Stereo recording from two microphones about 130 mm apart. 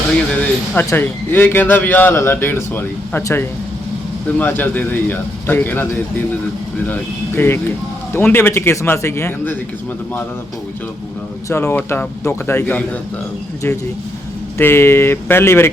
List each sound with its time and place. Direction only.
0.3 s a man's voice: 10° left (ahead or behind)
11.4 s a man's voice: 20° left (ahead or behind)
14.6 s speech: 20° left (ahead or behind)